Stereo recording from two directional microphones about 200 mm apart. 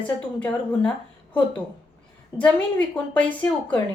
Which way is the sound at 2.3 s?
5° left (ahead or behind).